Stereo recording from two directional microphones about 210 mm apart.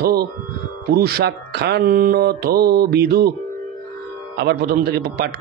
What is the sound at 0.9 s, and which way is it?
Mantra, 50° right (ahead or behind).